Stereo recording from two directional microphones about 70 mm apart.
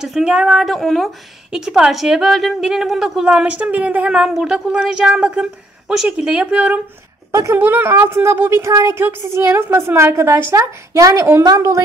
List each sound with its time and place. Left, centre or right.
0.0 s a woman's voice: centre
1.5 s a woman's voice: centre
3.3 s a woman's voice: centre
4.2 s a woman's voice: centre
7.5 s a woman's voice: right
8.9 s a woman's voice: right
11.0 s a woman's voice: right